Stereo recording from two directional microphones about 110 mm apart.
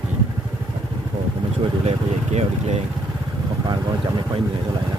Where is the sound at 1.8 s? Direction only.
85° right.